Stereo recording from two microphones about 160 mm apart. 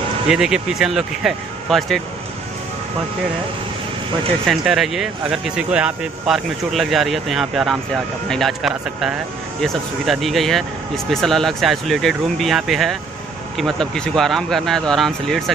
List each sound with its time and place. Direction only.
0.3 s speech: 5° right (ahead or behind)
4.5 s speech: centre (ahead or behind)